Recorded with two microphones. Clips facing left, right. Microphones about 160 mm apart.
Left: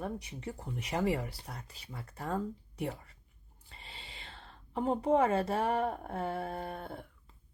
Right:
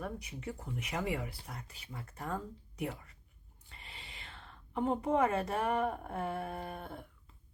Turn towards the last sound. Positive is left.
turn(degrees=30)  # may be behind; listen again after turning